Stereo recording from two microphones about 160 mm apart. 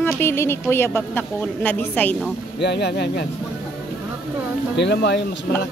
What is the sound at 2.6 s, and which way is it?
Speech, 90° left.